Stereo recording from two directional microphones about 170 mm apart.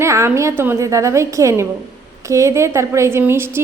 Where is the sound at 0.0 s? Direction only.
15° right (ahead or behind).